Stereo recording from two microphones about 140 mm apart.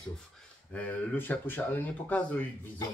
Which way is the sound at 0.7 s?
10° left (ahead or behind).